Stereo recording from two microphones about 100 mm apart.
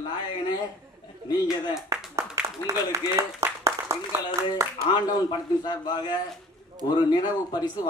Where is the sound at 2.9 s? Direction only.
30° right (ahead or behind).